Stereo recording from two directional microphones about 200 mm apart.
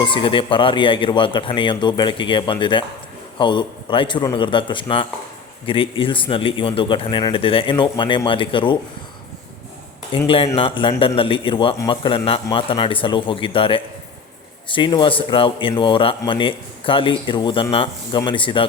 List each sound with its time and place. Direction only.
0.0 s speech: 25° left (ahead or behind)
10.1 s speech: 25° left (ahead or behind)